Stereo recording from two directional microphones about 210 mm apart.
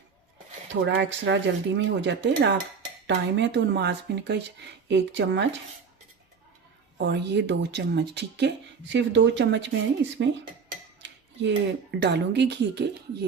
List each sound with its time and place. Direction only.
0.7 s speech: 60° right (ahead or behind)
7.0 s speech: 55° right (ahead or behind)
11.0 s speech: 60° right (ahead or behind)